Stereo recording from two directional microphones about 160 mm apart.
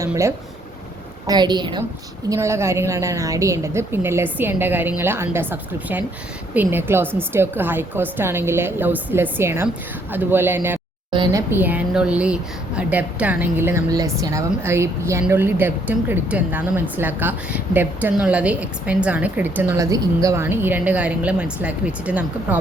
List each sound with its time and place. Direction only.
0.0 s a woman's voice: 15° right (ahead or behind)
11.1 s speech: 25° right (ahead or behind); by 22.6 s 10° right (ahead or behind)